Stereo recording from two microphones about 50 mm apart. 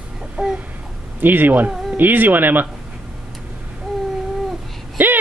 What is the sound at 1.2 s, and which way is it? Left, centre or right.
Speech, right.